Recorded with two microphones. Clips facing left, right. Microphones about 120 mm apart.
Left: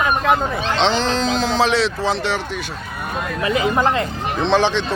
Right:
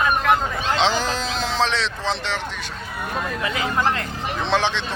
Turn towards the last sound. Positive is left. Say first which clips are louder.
# left 5 dB
turn(degrees=0)  # may be behind; listen again after turning